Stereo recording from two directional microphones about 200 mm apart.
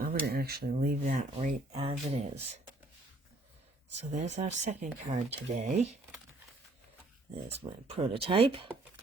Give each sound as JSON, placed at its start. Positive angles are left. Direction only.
{"t": 0.0, "sound": "speech", "side_deg": -50}
{"t": 4.1, "sound": "speech", "side_deg": -35}
{"t": 7.5, "sound": "speech", "side_deg": -30}